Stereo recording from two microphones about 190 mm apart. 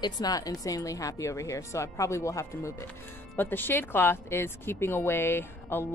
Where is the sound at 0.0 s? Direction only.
20° left (ahead or behind).